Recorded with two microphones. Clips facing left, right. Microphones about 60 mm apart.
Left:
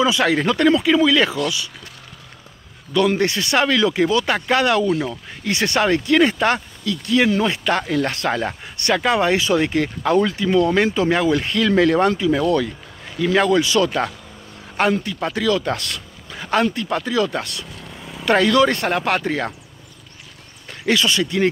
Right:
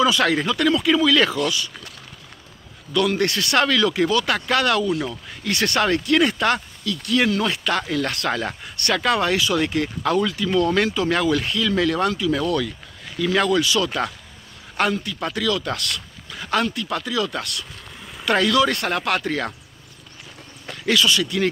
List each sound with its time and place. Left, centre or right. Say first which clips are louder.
0.0 s speech: left 1 dB; centre
0.5 s speech: left 4 dB; left
0.8 s speech: left 2 dB; centre
2.9 s speech: left 3 dB; left
11.5 s speech: left 5 dB; left
13.8 s speech: left 3 dB; centre
20.8 s speech: left 1 dB; left